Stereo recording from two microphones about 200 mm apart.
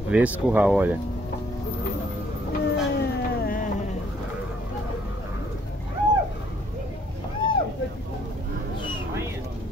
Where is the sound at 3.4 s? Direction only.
45° left (ahead or behind).